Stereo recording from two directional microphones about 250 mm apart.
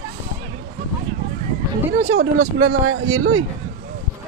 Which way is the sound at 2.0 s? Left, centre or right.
Right.